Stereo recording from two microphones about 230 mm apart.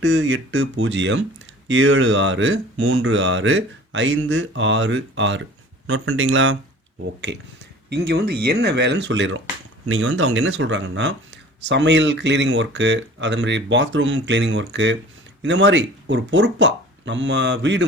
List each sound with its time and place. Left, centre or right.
0.0 s speech: right
9.8 s speech: right